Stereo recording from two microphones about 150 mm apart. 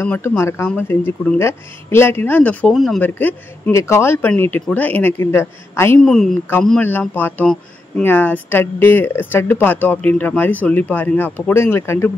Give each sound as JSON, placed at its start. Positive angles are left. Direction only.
{"t": 0.0, "sound": "speech", "side_deg": 10}
{"t": 3.0, "sound": "speech", "side_deg": 10}
{"t": 5.9, "sound": "a woman's voice", "side_deg": 5}